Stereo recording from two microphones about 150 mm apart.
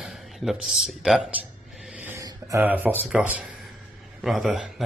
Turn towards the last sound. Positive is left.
turn(degrees=0)  # may be behind; listen again after turning